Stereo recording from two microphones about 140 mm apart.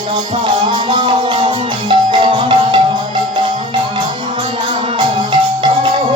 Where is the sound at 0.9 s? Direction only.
40° right (ahead or behind).